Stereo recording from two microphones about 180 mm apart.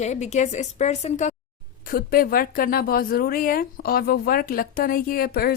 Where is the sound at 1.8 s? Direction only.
55° left (ahead or behind).